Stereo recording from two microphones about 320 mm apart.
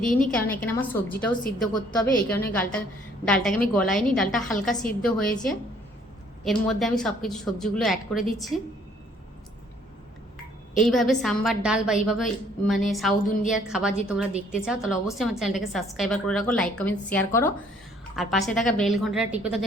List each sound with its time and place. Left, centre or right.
0.3 s a woman's voice: centre
10.8 s a woman's voice: centre